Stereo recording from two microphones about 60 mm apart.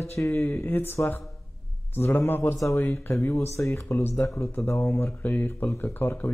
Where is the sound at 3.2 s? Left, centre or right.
Left.